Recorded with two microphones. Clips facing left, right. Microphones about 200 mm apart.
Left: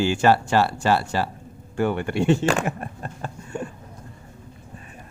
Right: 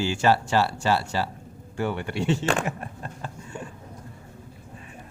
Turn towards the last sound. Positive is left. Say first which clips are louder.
# left 5 dB
turn(degrees=50)  # may be behind; listen again after turning